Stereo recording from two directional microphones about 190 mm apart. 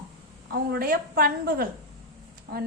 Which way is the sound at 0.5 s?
50° right (ahead or behind).